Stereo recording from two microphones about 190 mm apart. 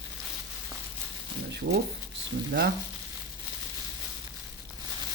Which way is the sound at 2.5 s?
60° right (ahead or behind).